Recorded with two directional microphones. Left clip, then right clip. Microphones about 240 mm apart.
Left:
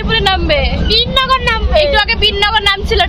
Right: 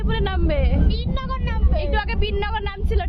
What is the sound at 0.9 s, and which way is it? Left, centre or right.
Vehicle, left.